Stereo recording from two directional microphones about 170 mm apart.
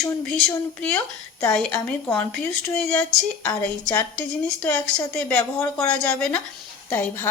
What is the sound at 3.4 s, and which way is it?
Speech, 20° left (ahead or behind).